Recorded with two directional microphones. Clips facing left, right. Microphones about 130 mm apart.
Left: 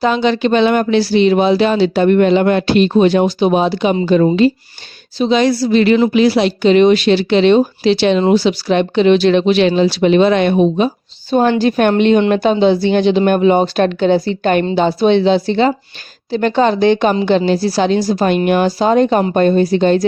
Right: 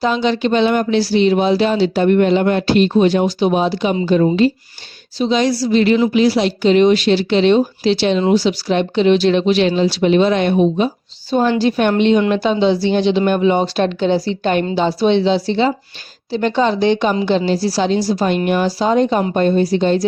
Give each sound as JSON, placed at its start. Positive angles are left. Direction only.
{"t": 0.0, "sound": "speech", "side_deg": 65}
{"t": 4.0, "sound": "a woman's voice", "side_deg": 80}
{"t": 5.1, "sound": "speech", "side_deg": 60}